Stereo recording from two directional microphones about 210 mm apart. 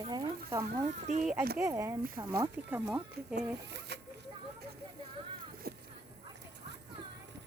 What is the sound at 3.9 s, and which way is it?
Zipper, 55° right (ahead or behind).